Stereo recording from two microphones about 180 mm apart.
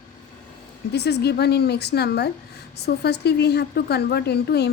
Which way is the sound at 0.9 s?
65° left (ahead or behind).